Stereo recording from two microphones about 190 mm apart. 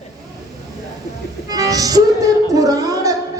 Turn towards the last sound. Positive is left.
turn(degrees=-20)  # may be behind; listen again after turning